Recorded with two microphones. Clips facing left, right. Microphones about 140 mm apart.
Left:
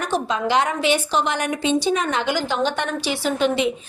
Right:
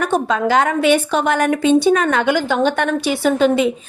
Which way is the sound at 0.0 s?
55° right (ahead or behind).